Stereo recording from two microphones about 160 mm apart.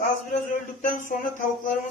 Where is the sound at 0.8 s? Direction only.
55° left (ahead or behind).